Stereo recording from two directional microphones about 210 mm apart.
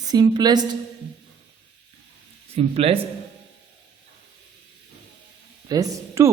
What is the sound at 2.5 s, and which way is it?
Speech, 30° right (ahead or behind).